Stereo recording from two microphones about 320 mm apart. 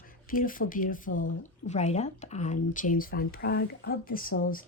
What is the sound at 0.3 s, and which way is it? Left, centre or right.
Speech, left.